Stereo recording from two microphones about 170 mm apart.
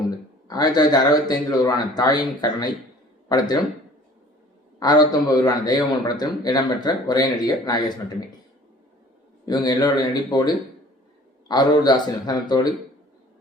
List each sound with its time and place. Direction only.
0.4 s a man's voice: 25° left (ahead or behind)
4.8 s a man's voice: 25° left (ahead or behind)
9.5 s a man's voice: 25° left (ahead or behind)